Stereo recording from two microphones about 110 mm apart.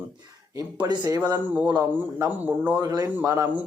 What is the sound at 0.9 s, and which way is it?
Speech, 40° right (ahead or behind).